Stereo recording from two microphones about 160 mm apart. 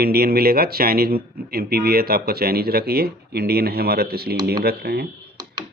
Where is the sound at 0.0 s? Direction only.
75° right (ahead or behind).